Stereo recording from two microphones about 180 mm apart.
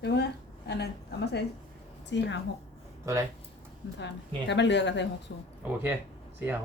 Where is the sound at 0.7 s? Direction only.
65° left (ahead or behind).